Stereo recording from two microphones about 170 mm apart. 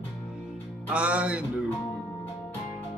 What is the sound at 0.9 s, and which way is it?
Music, 5° right (ahead or behind).